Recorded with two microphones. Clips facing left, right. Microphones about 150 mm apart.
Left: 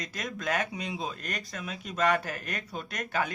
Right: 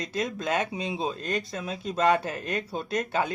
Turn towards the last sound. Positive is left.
turn(degrees=-25)  # may be behind; listen again after turning